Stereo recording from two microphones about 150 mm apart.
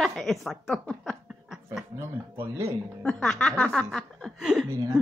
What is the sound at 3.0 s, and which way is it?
Speech, 5° left (ahead or behind).